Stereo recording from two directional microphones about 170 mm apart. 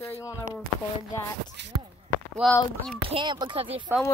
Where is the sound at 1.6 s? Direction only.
90° right.